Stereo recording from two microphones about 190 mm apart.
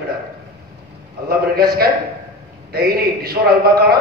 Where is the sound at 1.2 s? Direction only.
55° right (ahead or behind).